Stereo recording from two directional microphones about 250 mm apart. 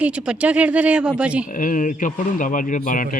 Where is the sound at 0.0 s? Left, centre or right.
Centre.